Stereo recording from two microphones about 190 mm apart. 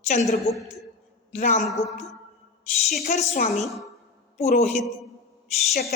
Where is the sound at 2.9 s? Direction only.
45° left (ahead or behind).